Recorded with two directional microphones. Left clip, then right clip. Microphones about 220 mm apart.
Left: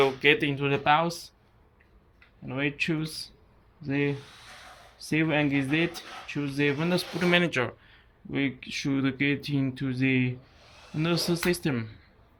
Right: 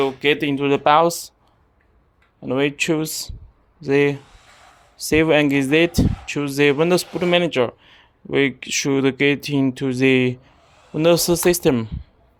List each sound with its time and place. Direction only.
0.0 s speech: 20° right (ahead or behind)
2.5 s speech: 35° right (ahead or behind)
7.2 s speech: 25° right (ahead or behind)